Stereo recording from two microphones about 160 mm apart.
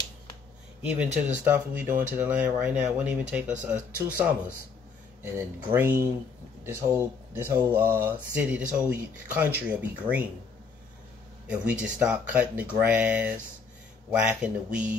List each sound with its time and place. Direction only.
1.0 s speech: 45° right (ahead or behind)
1.4 s speech: 10° right (ahead or behind)
11.4 s speech: 10° right (ahead or behind)